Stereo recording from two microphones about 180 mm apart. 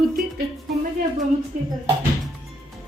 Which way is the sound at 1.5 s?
45° right (ahead or behind).